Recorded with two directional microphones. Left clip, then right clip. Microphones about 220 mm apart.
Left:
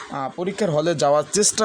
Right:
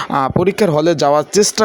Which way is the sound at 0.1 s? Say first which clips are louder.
Right 11 dB; 30° right (ahead or behind).